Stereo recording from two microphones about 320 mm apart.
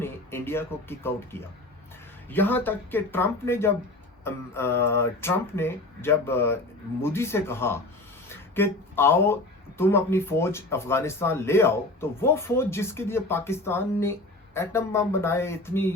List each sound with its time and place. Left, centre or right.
0.0 s speech: centre